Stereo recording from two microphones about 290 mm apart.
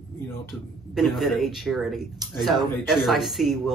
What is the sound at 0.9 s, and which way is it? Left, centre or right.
Speech, centre.